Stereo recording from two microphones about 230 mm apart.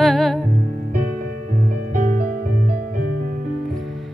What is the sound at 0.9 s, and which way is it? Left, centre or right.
Music, right.